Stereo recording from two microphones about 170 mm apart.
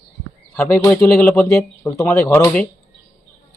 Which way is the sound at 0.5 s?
15° left (ahead or behind).